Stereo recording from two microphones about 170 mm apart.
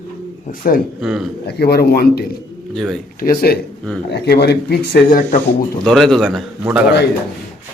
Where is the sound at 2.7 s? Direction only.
Centre (ahead or behind).